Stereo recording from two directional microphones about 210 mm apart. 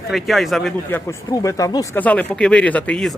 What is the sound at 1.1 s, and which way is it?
Speech, 15° left (ahead or behind).